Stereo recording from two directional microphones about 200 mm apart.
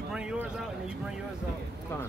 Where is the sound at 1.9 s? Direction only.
15° left (ahead or behind).